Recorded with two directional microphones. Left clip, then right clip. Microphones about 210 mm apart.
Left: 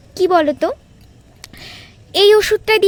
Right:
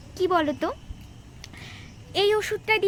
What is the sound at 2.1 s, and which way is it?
Speech, 50° left (ahead or behind).